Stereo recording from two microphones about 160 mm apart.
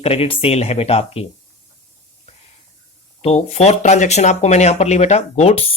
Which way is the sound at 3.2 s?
40° left (ahead or behind).